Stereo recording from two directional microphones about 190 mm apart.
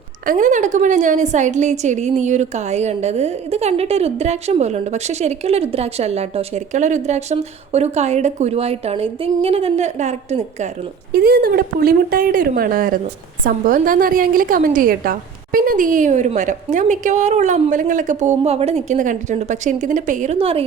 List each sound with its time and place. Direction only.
0.3 s a woman's voice: 40° right (ahead or behind)
11.1 s a woman's voice: 50° right (ahead or behind); by 20.7 s 30° right (ahead or behind)